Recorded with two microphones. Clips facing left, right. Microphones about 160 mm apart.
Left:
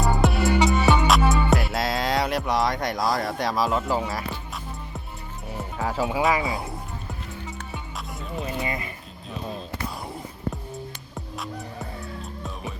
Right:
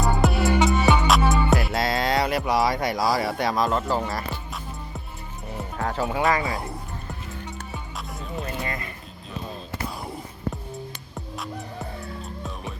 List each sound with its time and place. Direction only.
0.0 s music: centre (ahead or behind)
5.5 s speech: 5° left (ahead or behind)
7.1 s music: centre (ahead or behind)
8.6 s a sound: 5° left (ahead or behind)
11.1 s music: centre (ahead or behind)